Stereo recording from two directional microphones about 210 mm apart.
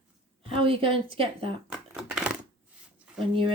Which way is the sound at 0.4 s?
25° right (ahead or behind).